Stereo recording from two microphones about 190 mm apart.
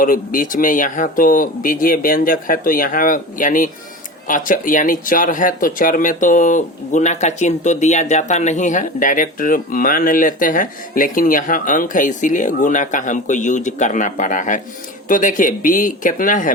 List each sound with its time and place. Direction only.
0.0 s speech: 45° left (ahead or behind)